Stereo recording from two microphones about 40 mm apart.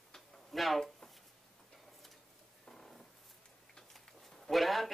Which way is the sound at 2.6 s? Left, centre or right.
Centre.